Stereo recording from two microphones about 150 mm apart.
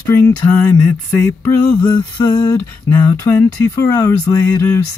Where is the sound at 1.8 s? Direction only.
20° left (ahead or behind).